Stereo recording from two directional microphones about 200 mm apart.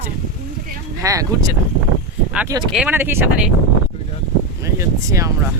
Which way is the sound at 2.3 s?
10° right (ahead or behind).